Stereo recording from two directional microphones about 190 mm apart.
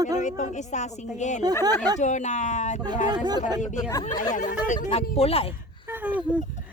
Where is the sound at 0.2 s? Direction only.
40° left (ahead or behind).